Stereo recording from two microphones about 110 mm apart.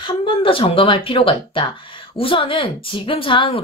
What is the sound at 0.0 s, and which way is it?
Speech, 55° left (ahead or behind).